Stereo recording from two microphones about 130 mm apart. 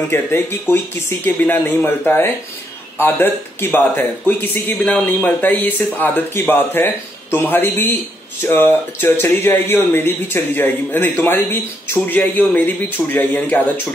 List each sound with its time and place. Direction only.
0.1 s speech: 15° left (ahead or behind)